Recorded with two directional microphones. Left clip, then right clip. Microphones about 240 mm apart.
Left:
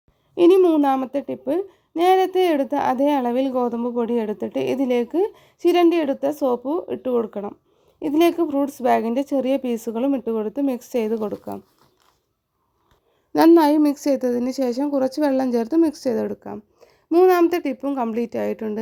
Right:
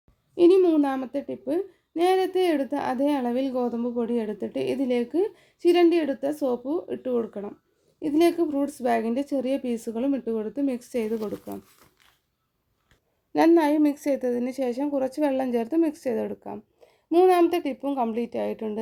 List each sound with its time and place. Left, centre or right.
0.3 s speech: left
13.5 s a woman's voice: left